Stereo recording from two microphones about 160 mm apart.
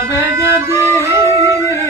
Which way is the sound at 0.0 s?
15° right (ahead or behind).